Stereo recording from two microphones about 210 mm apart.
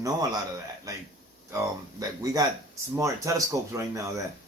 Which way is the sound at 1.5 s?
15° right (ahead or behind).